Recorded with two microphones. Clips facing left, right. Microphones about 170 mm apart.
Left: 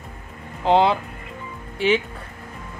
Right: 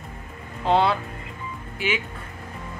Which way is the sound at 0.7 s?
25° left (ahead or behind).